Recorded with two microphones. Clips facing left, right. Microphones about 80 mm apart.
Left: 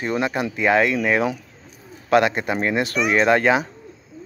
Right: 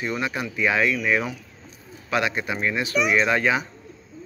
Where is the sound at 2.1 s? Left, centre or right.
Left.